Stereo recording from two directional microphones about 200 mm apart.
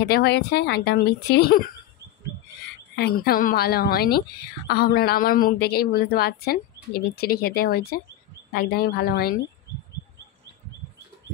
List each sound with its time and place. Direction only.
0.1 s speech: 55° left (ahead or behind)
3.0 s speech: 50° left (ahead or behind)